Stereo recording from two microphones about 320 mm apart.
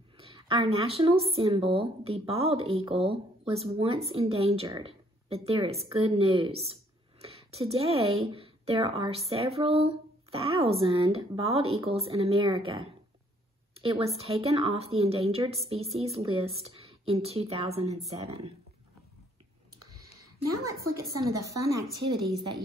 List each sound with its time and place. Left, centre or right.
0.2 s a woman's voice: centre
20.6 s a woman's voice: centre